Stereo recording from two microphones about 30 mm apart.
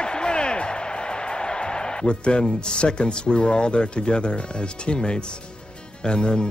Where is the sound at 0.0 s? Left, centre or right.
Left.